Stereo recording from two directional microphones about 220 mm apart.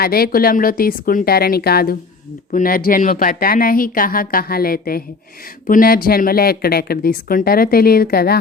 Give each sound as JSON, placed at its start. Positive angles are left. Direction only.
{"t": 0.0, "sound": "speech", "side_deg": 45}